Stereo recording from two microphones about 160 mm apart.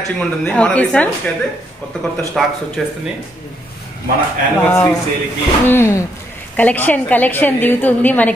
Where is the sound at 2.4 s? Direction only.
Centre (ahead or behind).